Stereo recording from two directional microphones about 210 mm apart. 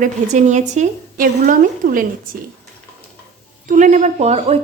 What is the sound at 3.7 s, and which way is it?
Speech, 35° right (ahead or behind).